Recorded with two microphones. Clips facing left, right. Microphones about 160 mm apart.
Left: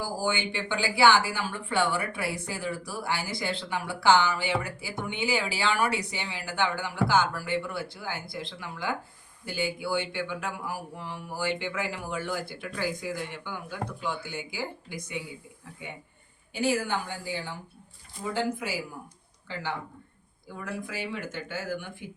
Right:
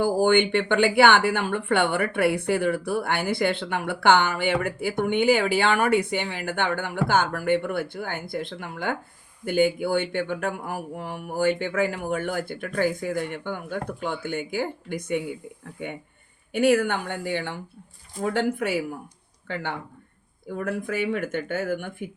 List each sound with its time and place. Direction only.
0.0 s speech: 60° right (ahead or behind)
20.5 s speech: 55° right (ahead or behind)